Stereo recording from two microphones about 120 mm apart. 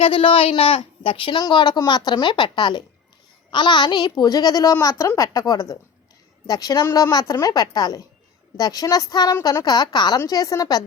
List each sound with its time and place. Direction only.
0.0 s a woman's voice: 50° left (ahead or behind); by 10.8 s 30° left (ahead or behind)